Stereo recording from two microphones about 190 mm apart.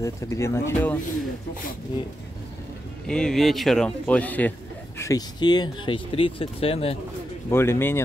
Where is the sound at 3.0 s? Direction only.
5° left (ahead or behind).